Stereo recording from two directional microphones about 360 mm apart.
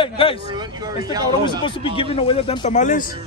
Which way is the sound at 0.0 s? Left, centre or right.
Centre.